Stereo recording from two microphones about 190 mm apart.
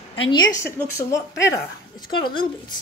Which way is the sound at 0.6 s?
15° left (ahead or behind).